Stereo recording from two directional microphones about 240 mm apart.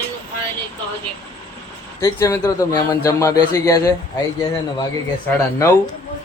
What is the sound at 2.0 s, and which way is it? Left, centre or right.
Speech, centre.